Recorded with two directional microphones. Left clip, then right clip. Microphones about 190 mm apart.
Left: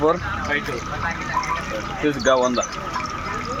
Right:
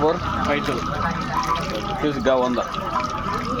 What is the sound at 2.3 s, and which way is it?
Speech, 25° left (ahead or behind).